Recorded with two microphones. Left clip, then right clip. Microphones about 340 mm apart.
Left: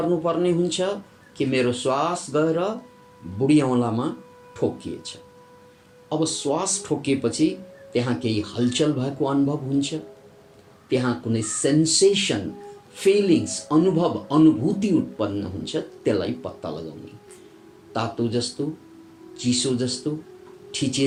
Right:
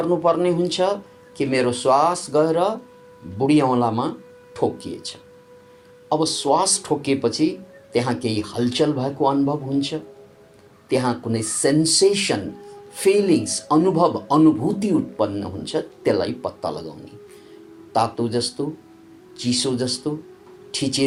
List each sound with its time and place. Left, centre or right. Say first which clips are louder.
0.3 s a man's voice: right 3 dB; centre
6.1 s a man's voice: right 5 dB; centre
17.9 s a man's voice: right 5 dB; centre